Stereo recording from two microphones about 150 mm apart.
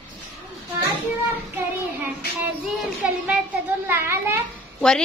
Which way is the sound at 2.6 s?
5° right (ahead or behind).